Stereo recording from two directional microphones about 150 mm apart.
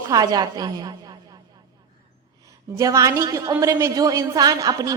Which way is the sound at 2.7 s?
20° right (ahead or behind).